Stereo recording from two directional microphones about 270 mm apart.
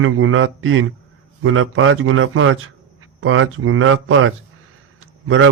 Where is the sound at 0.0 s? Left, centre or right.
Right.